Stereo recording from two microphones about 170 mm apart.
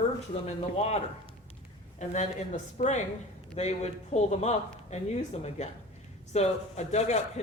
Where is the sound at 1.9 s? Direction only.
45° left (ahead or behind).